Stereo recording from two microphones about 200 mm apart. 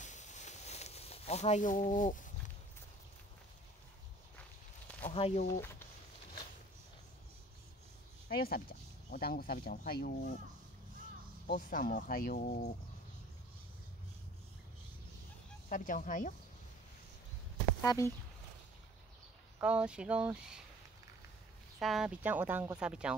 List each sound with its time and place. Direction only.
0.0 s a sound: 35° left (ahead or behind)
5.1 s speech: 30° left (ahead or behind)
5.6 s speech: 10° left (ahead or behind)
8.3 s speech: 50° left (ahead or behind)
11.4 s speech: 45° left (ahead or behind)
15.7 s speech: 40° left (ahead or behind)
17.8 s speech: 15° left (ahead or behind)
19.6 s speech: 5° right (ahead or behind)
21.7 s speech: centre (ahead or behind)